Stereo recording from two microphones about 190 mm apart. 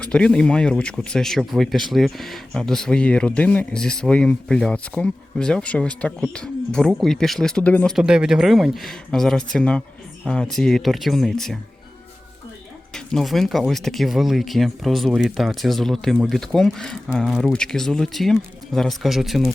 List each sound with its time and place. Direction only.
0.0 s speech: 5° left (ahead or behind)
12.9 s speech: centre (ahead or behind)